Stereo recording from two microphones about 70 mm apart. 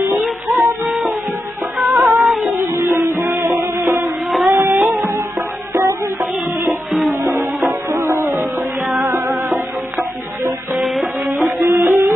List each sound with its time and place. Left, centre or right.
0.2 s music: centre
2.5 s music: right
6.9 s music: centre
7.9 s music: right
10.8 s music: centre
11.6 s music: right